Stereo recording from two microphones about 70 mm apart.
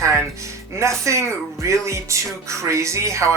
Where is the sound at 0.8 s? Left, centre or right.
Right.